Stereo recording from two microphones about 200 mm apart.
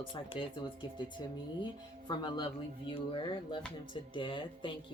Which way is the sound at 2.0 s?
25° left (ahead or behind).